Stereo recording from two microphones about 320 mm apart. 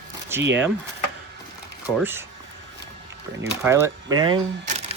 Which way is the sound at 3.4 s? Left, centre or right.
Centre.